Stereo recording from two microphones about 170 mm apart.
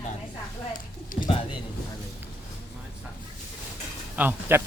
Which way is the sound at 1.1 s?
55° left (ahead or behind).